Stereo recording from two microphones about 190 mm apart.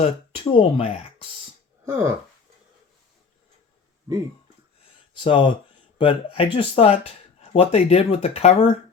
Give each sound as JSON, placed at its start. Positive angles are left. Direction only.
{"t": 0.0, "sound": "speech", "side_deg": 30}
{"t": 1.9, "sound": "speech", "side_deg": -10}
{"t": 5.2, "sound": "speech", "side_deg": 25}